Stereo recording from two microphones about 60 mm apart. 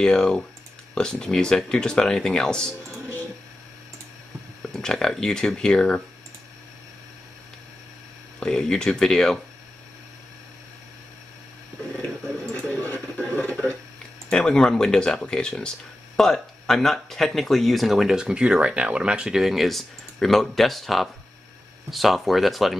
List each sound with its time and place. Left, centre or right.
0.0 s speech: centre
4.7 s speech: centre
8.4 s speech: centre
12.5 s radio: left
13.3 s a sound: left
14.3 s speech: centre